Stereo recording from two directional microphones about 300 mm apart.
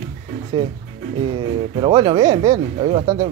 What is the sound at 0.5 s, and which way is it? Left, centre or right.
Speech, centre.